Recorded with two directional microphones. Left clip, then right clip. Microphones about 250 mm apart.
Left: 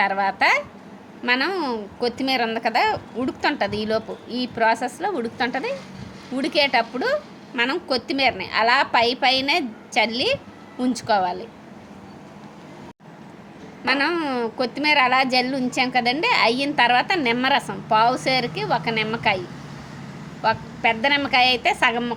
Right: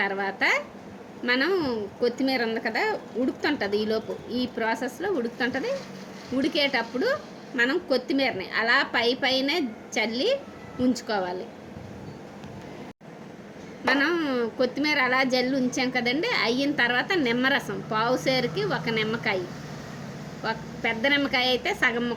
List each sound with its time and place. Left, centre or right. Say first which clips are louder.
0.0 s a woman's voice: left 6 dB; left
13.8 s a woman's voice: left 2 dB; left
20.4 s a woman's voice: left 8 dB; left